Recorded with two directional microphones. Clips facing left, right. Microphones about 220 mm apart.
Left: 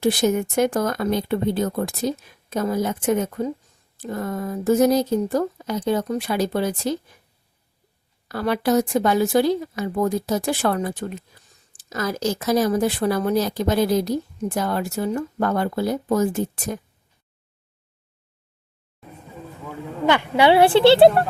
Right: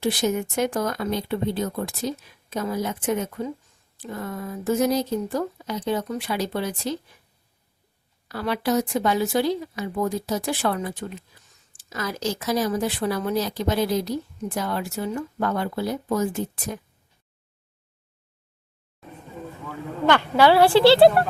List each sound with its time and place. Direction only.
0.0 s speech: 50° left (ahead or behind)
8.3 s speech: 50° left (ahead or behind)
20.1 s a woman's voice: 15° left (ahead or behind)